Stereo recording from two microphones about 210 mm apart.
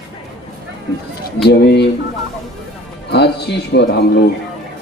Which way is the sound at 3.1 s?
50° left (ahead or behind).